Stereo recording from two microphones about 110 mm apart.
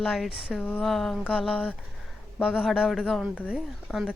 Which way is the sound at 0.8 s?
Centre (ahead or behind).